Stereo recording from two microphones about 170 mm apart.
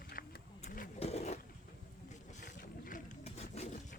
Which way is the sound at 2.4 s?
55° left (ahead or behind).